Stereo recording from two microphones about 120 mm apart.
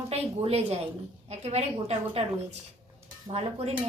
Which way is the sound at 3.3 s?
60° right (ahead or behind).